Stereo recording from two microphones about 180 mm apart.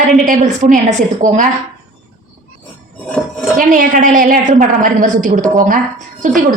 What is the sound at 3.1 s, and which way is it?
Speech, centre (ahead or behind).